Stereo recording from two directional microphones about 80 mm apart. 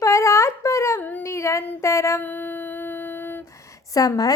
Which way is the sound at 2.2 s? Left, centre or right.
Left.